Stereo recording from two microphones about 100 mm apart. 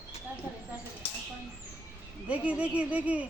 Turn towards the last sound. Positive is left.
turn(degrees=-15)  # may be behind; listen again after turning